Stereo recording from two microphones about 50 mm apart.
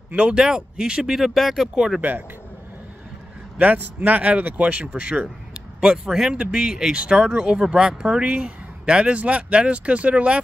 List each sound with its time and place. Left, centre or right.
0.1 s speech: right
2.0 s speech: right
3.5 s speech: right
5.5 s a sound: centre
6.3 s speech: centre